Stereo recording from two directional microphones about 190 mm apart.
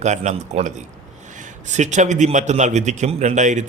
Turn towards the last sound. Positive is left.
turn(degrees=-40)  # may be behind; listen again after turning